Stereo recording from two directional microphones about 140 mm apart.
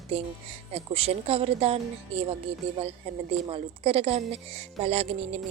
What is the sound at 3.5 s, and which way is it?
A woman's voice, 40° right (ahead or behind).